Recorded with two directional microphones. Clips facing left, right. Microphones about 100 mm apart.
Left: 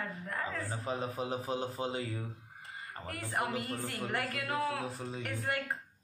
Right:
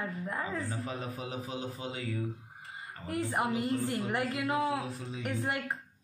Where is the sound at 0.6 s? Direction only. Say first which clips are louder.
Left 1 dB; 30° left (ahead or behind).